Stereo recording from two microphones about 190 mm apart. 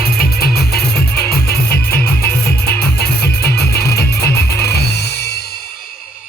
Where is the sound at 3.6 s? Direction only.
55° left (ahead or behind).